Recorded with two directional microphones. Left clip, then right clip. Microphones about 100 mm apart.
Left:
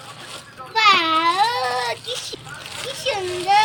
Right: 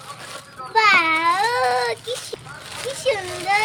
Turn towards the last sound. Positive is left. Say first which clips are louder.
# even
turn(degrees=-35)  # may be behind; listen again after turning